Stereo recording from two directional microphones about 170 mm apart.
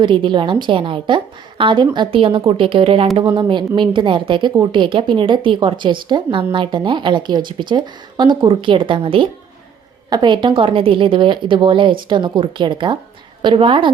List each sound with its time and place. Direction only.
0.0 s a woman's voice: 30° right (ahead or behind)